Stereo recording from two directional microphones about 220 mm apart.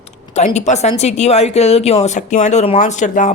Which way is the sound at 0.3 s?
30° left (ahead or behind).